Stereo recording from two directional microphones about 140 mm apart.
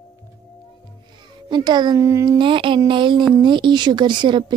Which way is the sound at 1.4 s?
30° right (ahead or behind).